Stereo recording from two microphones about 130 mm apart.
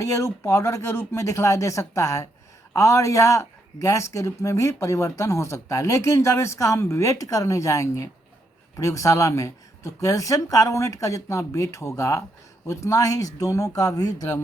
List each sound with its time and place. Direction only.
0.0 s a man's voice: 20° left (ahead or behind)